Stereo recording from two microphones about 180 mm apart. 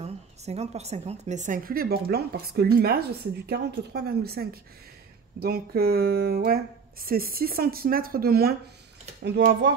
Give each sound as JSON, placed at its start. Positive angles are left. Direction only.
{"t": 0.0, "sound": "a woman's voice", "side_deg": -35}
{"t": 9.2, "sound": "speech", "side_deg": -70}